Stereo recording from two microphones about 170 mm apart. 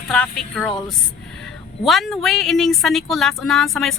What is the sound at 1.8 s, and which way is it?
Speech, centre (ahead or behind).